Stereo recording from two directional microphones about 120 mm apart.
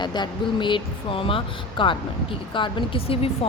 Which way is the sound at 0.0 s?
40° left (ahead or behind).